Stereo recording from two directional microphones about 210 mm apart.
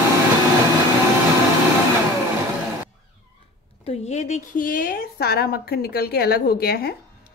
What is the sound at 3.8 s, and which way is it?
A woman's voice, 30° left (ahead or behind).